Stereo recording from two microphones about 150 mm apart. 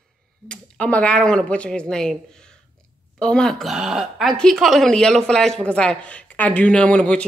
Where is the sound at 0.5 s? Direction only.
5° left (ahead or behind).